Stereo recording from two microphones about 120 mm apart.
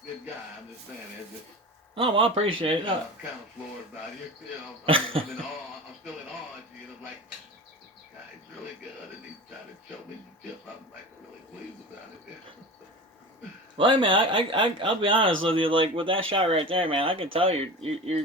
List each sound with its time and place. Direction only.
2.0 s a man's voice: 50° right (ahead or behind)
4.9 s a man's voice: 50° right (ahead or behind)
13.7 s a man's voice: 45° right (ahead or behind)